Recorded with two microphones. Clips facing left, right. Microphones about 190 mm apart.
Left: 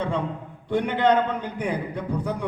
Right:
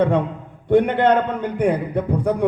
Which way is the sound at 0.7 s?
55° right (ahead or behind).